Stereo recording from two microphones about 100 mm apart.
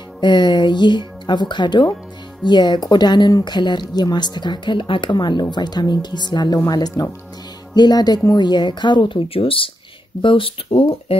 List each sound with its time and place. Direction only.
0.2 s speech: 50° left (ahead or behind); by 11.1 s 70° left (ahead or behind)